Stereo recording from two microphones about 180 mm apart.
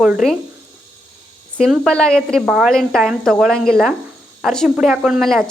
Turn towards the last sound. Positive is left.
turn(degrees=0)  # may be behind; listen again after turning